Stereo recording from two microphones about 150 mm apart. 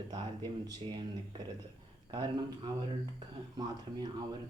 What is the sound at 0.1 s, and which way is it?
Speech, 25° right (ahead or behind).